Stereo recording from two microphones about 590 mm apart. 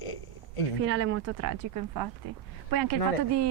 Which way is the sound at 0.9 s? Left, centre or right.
Right.